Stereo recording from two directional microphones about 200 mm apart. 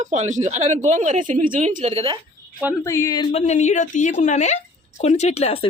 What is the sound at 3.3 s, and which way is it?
Speech, 35° left (ahead or behind).